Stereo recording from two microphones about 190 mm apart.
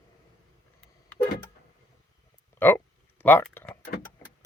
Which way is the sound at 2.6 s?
10° left (ahead or behind).